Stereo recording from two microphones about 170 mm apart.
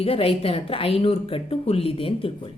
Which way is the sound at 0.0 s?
35° left (ahead or behind).